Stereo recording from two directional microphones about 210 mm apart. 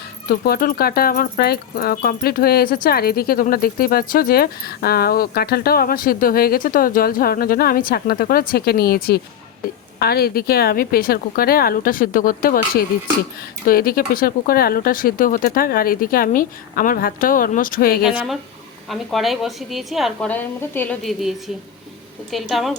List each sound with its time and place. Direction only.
0.3 s speech: 45° left (ahead or behind)
18.9 s a woman's voice: centre (ahead or behind)